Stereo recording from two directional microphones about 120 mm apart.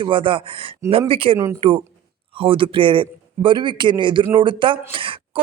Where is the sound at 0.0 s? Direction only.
45° right (ahead or behind).